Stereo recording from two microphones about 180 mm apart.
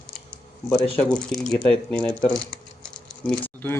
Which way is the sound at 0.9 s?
5° left (ahead or behind).